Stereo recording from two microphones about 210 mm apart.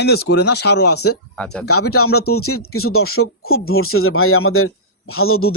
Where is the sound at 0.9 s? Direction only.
90° left.